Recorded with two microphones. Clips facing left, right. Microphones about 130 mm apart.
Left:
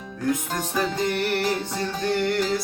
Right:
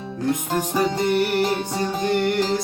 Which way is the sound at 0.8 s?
15° right (ahead or behind).